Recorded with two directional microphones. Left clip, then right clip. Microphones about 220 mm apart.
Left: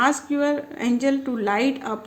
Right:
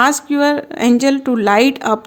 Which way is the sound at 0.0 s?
50° right (ahead or behind).